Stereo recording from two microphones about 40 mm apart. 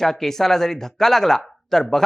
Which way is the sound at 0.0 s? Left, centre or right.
Centre.